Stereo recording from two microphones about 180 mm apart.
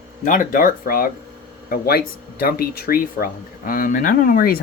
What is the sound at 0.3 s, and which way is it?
Speech, 50° left (ahead or behind).